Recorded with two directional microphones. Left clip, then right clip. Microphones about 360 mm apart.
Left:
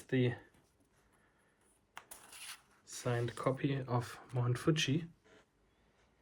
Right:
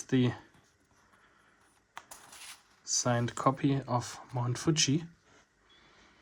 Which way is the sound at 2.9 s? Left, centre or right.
Centre.